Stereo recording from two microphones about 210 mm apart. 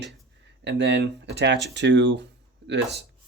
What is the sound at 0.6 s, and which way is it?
Speech, 55° right (ahead or behind).